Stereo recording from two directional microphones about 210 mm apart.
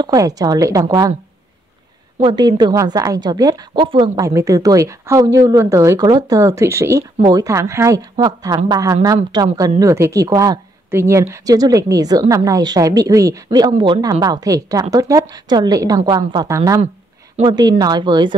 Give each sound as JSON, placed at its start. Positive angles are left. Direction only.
{"t": 0.0, "sound": "a woman's voice", "side_deg": -15}
{"t": 2.1, "sound": "a woman's voice", "side_deg": -20}